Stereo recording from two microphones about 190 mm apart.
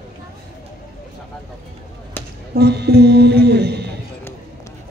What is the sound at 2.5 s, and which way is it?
A man's voice, 60° right (ahead or behind).